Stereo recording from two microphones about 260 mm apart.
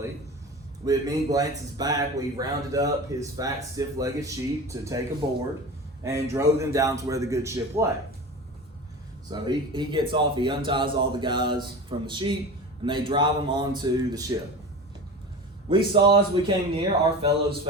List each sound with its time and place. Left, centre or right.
0.9 s speech: centre
9.3 s speech: centre
15.7 s speech: centre